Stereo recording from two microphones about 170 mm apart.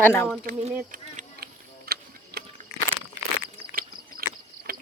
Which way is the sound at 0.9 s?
55° right (ahead or behind).